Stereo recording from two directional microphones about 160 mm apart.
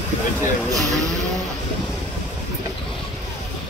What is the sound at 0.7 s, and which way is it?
Speech, centre (ahead or behind).